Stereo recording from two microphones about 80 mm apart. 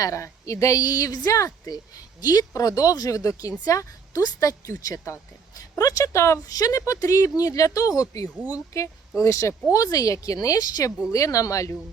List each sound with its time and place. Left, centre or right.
0.0 s a woman's voice: left
8.4 s speech: right
9.2 s a woman's voice: left